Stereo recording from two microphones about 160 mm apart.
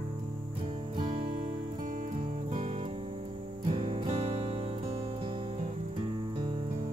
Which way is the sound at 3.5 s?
30° right (ahead or behind).